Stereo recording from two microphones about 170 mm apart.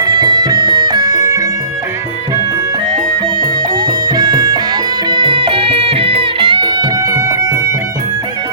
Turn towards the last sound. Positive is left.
turn(degrees=-25)  # may be behind; listen again after turning